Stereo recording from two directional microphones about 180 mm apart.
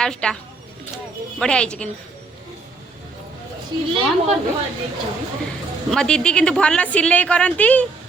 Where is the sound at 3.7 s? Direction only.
25° right (ahead or behind).